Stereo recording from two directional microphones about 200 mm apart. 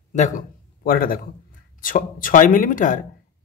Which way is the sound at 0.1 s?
35° left (ahead or behind).